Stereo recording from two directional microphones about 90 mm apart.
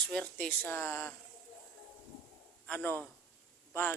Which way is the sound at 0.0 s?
10° left (ahead or behind).